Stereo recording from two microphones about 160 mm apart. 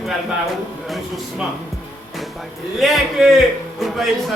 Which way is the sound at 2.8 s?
Centre (ahead or behind).